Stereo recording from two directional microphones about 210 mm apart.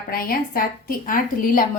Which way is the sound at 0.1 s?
45° left (ahead or behind).